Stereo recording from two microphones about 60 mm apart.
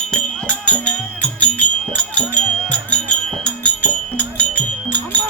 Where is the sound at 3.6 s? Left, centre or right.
Left.